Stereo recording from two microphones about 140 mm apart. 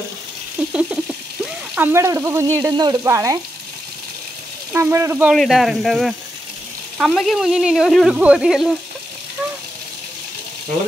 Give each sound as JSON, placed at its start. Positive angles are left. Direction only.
{"t": 0.7, "sound": "a sound", "side_deg": -5}
{"t": 2.7, "sound": "speech", "side_deg": -30}
{"t": 4.7, "sound": "speech", "side_deg": -20}
{"t": 5.3, "sound": "speech", "side_deg": 0}